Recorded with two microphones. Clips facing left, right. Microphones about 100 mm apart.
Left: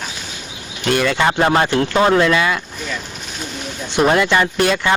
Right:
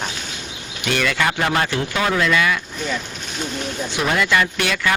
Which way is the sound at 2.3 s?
30° left (ahead or behind).